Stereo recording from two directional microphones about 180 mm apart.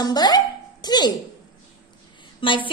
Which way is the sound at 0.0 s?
20° left (ahead or behind).